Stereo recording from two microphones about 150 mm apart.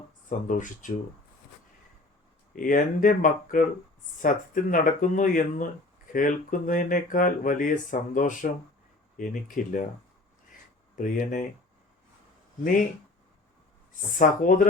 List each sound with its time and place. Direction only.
0.3 s speech: 60° left (ahead or behind)
2.6 s speech: 60° left (ahead or behind)
10.9 s speech: 60° left (ahead or behind)
14.2 s speech: 65° left (ahead or behind)